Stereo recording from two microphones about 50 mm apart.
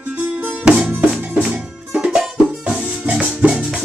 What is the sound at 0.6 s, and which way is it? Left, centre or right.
Music, right.